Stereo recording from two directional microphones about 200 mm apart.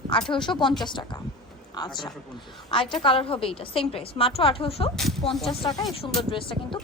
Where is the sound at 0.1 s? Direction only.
25° left (ahead or behind).